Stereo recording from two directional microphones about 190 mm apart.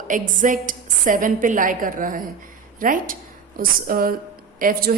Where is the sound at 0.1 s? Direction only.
45° right (ahead or behind).